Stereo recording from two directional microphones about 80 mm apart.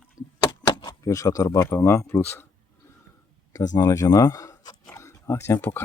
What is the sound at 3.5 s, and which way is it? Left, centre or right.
Speech, left.